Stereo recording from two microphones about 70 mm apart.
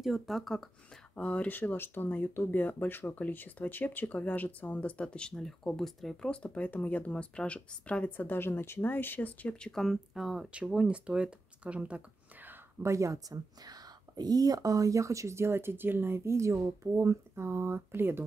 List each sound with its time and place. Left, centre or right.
0.0 s speech: centre
1.1 s speech: centre
6.3 s speech: centre; by 12.5 s right
12.8 s speech: right